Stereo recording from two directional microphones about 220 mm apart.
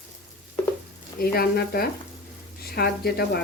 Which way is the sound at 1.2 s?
45° left (ahead or behind).